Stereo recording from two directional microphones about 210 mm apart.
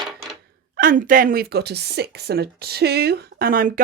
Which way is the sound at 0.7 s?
40° right (ahead or behind).